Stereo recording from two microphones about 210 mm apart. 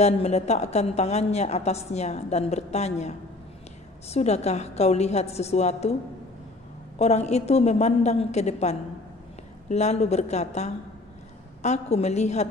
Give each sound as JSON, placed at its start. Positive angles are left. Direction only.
{"t": 0.0, "sound": "a woman's voice", "side_deg": 30}
{"t": 7.0, "sound": "a woman's voice", "side_deg": 30}